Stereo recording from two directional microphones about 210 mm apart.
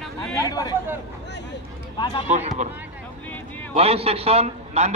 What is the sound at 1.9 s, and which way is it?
Speech, 20° left (ahead or behind).